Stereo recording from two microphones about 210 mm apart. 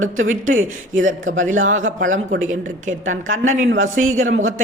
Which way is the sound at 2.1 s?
70° right (ahead or behind).